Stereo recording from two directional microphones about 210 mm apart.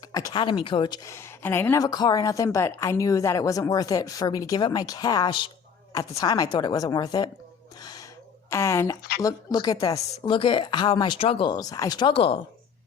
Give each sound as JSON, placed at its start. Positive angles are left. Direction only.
{"t": 0.1, "sound": "a woman's voice", "side_deg": 20}
{"t": 7.8, "sound": "a sound", "side_deg": 20}
{"t": 8.4, "sound": "a woman's voice", "side_deg": 15}